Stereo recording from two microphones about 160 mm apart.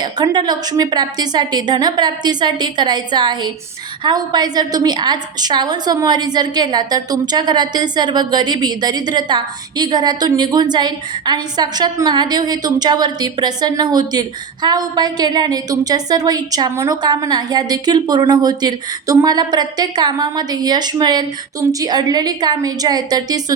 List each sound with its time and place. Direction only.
0.0 s a woman's voice: 25° right (ahead or behind)